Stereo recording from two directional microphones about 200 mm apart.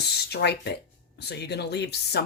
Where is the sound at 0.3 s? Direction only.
55° left (ahead or behind).